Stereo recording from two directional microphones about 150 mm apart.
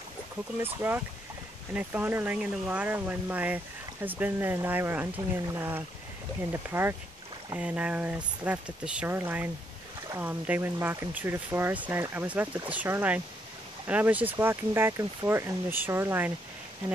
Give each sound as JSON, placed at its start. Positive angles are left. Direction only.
{"t": 0.6, "sound": "speech", "side_deg": -15}